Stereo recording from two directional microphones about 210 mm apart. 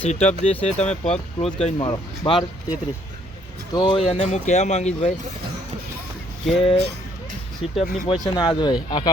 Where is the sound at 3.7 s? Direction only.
25° left (ahead or behind).